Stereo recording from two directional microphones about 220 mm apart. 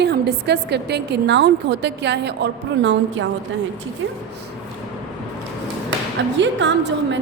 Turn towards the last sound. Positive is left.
turn(degrees=-55)  # may be behind; listen again after turning